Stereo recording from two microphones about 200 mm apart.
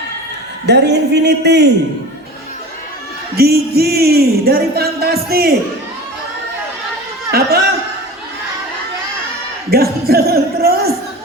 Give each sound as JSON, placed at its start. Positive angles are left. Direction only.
{"t": 0.6, "sound": "a man's voice", "side_deg": -55}
{"t": 3.3, "sound": "speech", "side_deg": -50}
{"t": 7.3, "sound": "speech", "side_deg": -50}
{"t": 9.6, "sound": "speech", "side_deg": -50}